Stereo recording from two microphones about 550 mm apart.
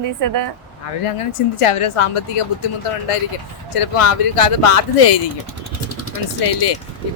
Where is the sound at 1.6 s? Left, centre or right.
Left.